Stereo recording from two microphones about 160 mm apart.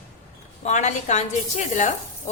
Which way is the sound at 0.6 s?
45° left (ahead or behind).